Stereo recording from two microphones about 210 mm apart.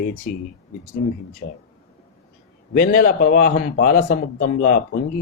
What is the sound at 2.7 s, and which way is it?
A man's voice, 45° left (ahead or behind).